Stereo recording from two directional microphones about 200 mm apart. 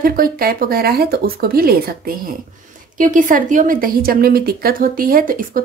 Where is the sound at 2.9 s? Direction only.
40° right (ahead or behind).